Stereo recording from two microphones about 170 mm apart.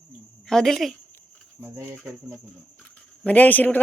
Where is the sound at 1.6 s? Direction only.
10° right (ahead or behind).